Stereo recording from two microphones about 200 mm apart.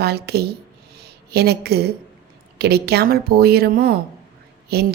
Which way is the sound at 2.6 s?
55° right (ahead or behind).